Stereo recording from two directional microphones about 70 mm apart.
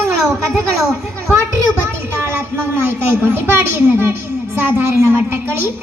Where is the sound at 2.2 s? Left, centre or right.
Right.